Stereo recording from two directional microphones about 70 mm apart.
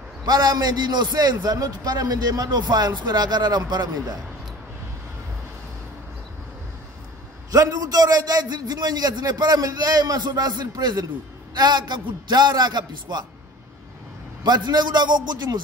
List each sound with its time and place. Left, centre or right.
0.2 s a man's voice: right
7.5 s a man's voice: right
14.4 s a man's voice: right